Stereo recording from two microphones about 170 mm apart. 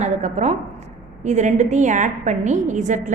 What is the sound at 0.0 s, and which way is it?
A woman's voice, 40° right (ahead or behind).